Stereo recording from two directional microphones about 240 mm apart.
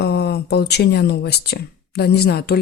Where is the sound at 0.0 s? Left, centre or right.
Left.